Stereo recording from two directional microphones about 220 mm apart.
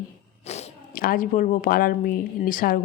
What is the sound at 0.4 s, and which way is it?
Speech, 30° left (ahead or behind).